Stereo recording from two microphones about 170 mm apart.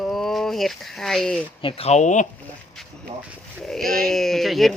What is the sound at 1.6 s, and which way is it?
Speech, 35° left (ahead or behind).